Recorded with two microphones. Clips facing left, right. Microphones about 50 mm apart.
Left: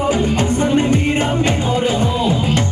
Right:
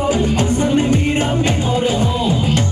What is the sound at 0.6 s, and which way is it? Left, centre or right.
Music, left.